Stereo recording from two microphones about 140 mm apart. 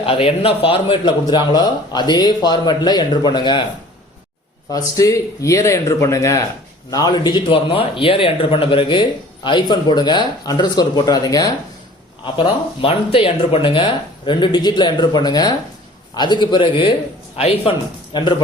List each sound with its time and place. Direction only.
0.0 s a man's voice: 40° left (ahead or behind)
4.7 s a man's voice: 25° left (ahead or behind)
12.2 s a man's voice: 40° left (ahead or behind)
17.3 s speech: 45° left (ahead or behind)
18.1 s a man's voice: 35° left (ahead or behind)